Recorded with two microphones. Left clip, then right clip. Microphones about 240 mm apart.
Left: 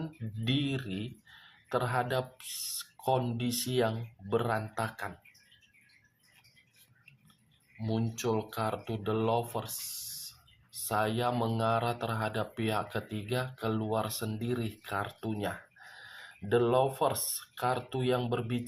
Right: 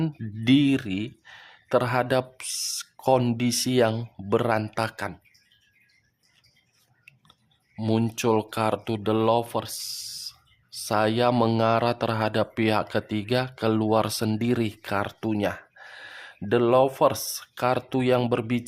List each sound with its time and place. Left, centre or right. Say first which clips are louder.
0.0 s speech: right 10 dB; right
7.8 s speech: right 9 dB; right